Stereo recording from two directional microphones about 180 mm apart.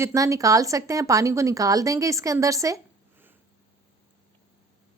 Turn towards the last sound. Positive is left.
turn(degrees=-15)  # may be behind; listen again after turning